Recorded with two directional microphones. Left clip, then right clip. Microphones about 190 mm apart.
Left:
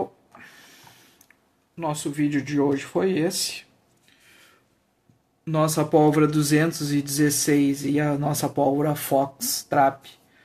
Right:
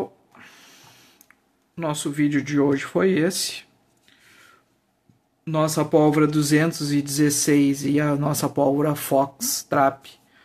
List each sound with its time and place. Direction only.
0.4 s a sound: 10° right (ahead or behind)
1.8 s speech: 25° right (ahead or behind)
5.4 s speech: 10° right (ahead or behind)